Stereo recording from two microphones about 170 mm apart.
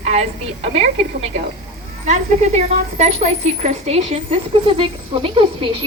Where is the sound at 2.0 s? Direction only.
45° right (ahead or behind).